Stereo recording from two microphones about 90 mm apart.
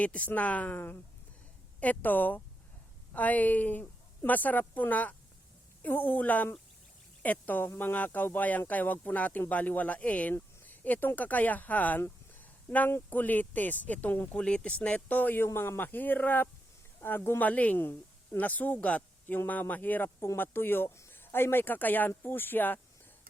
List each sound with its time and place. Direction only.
0.0 s speech: 15° left (ahead or behind)